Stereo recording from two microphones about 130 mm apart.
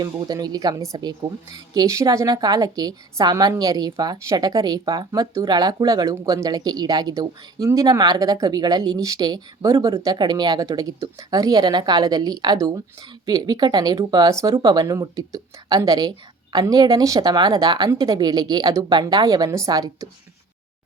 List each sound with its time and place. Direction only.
0.0 s speech: 30° right (ahead or behind)